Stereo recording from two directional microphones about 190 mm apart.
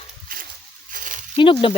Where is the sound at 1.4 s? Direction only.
25° left (ahead or behind).